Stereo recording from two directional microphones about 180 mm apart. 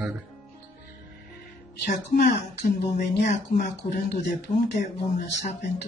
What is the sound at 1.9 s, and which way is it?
Speech, 50° left (ahead or behind).